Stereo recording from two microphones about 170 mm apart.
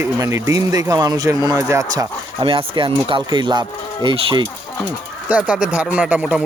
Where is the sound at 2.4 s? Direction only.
30° right (ahead or behind).